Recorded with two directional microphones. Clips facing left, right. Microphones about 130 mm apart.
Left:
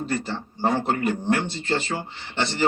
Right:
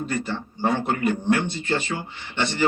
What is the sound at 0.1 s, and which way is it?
A man's voice, 30° left (ahead or behind).